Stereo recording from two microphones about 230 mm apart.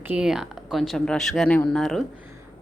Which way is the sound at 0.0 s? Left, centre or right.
Centre.